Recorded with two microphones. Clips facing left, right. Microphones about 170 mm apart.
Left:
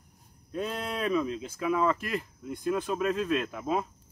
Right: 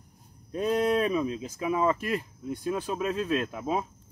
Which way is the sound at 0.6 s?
15° right (ahead or behind).